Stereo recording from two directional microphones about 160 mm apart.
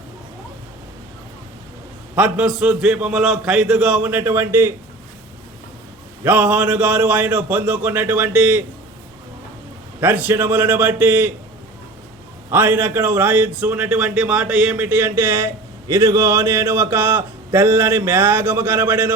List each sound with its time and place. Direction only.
2.1 s a man's voice: 5° right (ahead or behind)
6.2 s a man's voice: 10° right (ahead or behind)
10.0 s a man's voice: 10° right (ahead or behind)
12.5 s a man's voice: 15° right (ahead or behind)